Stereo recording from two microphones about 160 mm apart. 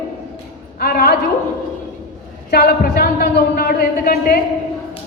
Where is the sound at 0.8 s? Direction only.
70° left (ahead or behind).